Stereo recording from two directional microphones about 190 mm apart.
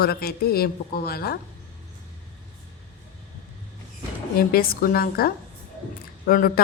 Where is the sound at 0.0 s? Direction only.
55° left (ahead or behind).